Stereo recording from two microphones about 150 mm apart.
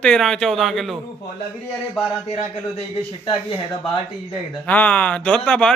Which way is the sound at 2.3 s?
45° left (ahead or behind).